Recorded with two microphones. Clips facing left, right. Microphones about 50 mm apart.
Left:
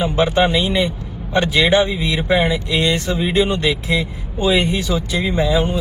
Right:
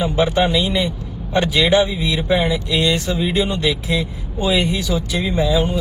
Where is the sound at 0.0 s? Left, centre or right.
Left.